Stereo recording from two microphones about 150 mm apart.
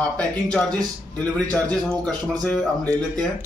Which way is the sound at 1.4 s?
5° left (ahead or behind).